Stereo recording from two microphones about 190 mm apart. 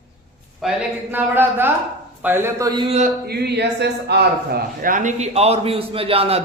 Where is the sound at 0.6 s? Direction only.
5° right (ahead or behind); by 2.9 s 25° right (ahead or behind).